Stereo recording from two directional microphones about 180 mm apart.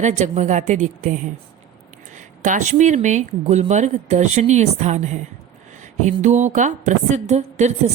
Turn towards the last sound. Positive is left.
turn(degrees=-40)  # may be behind; listen again after turning